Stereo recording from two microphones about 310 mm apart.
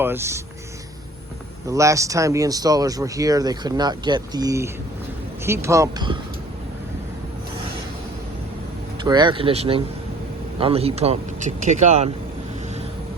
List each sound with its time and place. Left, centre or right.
0.0 s speech: centre
1.6 s speech: centre
9.0 s speech: centre